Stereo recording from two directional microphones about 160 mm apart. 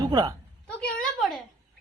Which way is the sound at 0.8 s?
5° left (ahead or behind).